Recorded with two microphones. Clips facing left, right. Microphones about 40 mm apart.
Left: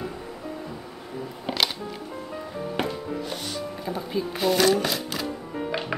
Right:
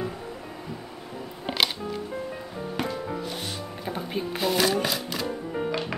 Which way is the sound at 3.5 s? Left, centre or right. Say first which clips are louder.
Left 2 dB; right.